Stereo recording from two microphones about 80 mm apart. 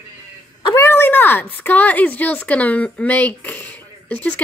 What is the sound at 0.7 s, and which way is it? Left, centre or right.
Speech, left.